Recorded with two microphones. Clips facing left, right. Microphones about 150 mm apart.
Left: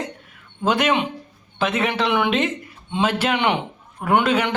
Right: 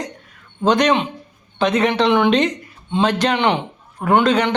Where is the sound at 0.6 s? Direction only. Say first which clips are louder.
Right 4 dB; 5° left (ahead or behind).